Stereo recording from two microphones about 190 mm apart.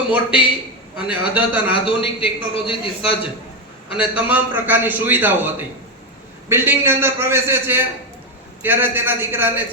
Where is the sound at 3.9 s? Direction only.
10° right (ahead or behind).